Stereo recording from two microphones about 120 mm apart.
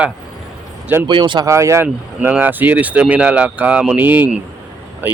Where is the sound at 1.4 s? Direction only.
25° right (ahead or behind).